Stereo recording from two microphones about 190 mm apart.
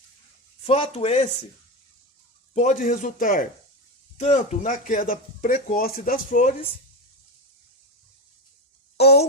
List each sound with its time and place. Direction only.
0.6 s speech: 30° left (ahead or behind)
2.6 s speech: 40° left (ahead or behind)
9.0 s speech: 60° left (ahead or behind)